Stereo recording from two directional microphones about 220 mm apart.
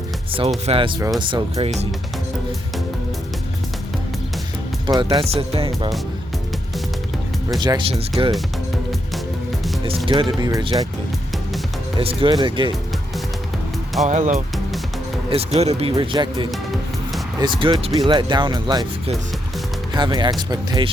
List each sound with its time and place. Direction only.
0.3 s speech: 25° right (ahead or behind)
4.9 s speech: 20° right (ahead or behind)
7.6 s speech: 20° right (ahead or behind)
10.1 s speech: 20° right (ahead or behind)
11.9 s speech: 25° right (ahead or behind)
14.1 s speech: 35° right (ahead or behind)